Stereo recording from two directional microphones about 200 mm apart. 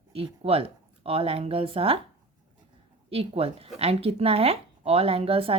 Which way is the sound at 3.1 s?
30° right (ahead or behind).